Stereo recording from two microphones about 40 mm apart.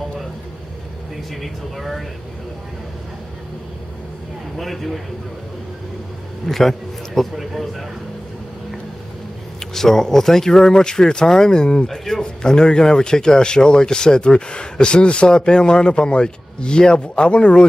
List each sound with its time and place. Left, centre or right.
1.3 s speech: centre
4.6 s speech: centre
6.4 s a man's voice: centre
9.8 s speech: centre; by 17.6 s left